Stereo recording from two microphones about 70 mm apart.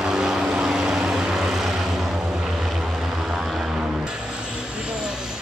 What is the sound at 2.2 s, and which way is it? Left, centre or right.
Vehicle, centre.